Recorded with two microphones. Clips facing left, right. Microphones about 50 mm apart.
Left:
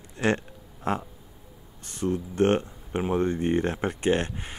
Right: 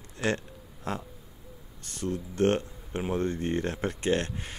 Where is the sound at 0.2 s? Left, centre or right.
Left.